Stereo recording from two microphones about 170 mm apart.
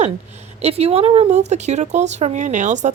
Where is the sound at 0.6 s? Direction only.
35° right (ahead or behind).